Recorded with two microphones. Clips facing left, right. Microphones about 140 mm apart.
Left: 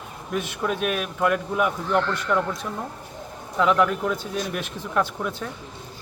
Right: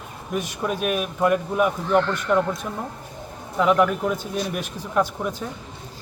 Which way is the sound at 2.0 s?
15° right (ahead or behind).